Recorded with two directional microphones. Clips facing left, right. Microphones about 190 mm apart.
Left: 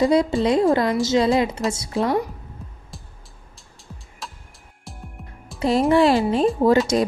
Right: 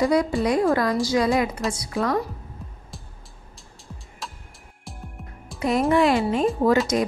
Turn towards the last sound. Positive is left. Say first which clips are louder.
# left 3 dB
turn(degrees=30)  # may be behind; listen again after turning